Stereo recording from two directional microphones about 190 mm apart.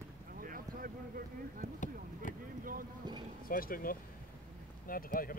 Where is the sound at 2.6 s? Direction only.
45° right (ahead or behind).